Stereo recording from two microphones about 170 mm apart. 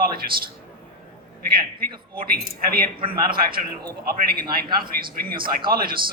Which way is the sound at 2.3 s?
60° right (ahead or behind).